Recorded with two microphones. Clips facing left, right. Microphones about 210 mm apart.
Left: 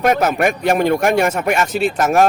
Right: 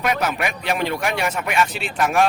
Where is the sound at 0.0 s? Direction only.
45° left (ahead or behind).